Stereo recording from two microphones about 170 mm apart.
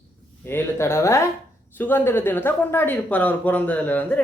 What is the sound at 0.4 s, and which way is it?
Speech, 15° left (ahead or behind).